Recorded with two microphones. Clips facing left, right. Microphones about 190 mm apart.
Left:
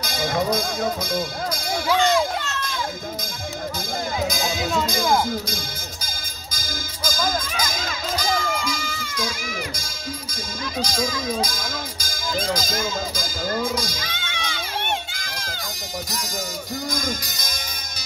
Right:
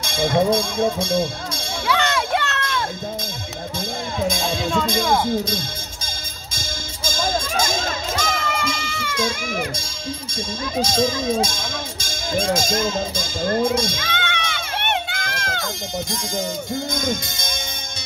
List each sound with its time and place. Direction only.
0.0 s speech: 25° right (ahead or behind)
1.9 s a sound: 65° right (ahead or behind)
4.3 s music: 25° right (ahead or behind)
4.8 s speech: 25° right (ahead or behind)
6.5 s music: 25° right (ahead or behind)
8.4 s music: 70° right (ahead or behind)
10.8 s speech: 25° right (ahead or behind)
14.0 s a sound: 65° right (ahead or behind)
16.7 s speech: 25° right (ahead or behind)